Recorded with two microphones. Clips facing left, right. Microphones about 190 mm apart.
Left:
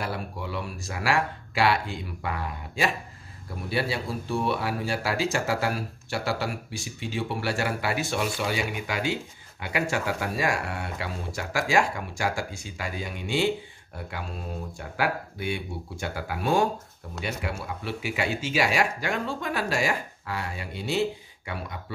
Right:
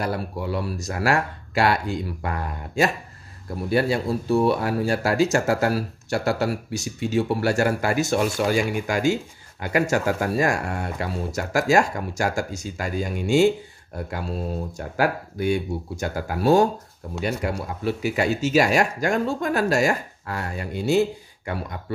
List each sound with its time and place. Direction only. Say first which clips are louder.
0.0 s speech: right 6 dB; 40° right (ahead or behind)